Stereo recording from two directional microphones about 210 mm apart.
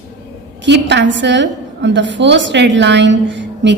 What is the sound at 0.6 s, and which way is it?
A woman's voice, 55° right (ahead or behind).